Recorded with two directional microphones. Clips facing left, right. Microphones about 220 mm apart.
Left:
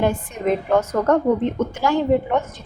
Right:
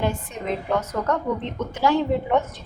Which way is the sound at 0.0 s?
50° left (ahead or behind).